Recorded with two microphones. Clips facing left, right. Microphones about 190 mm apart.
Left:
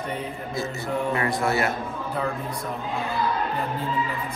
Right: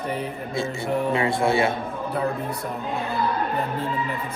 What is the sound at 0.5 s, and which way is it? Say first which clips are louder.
A man's voice: right 3 dB; 25° right (ahead or behind).